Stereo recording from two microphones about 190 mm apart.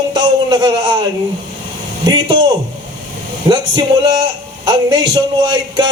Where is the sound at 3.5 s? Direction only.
25° right (ahead or behind).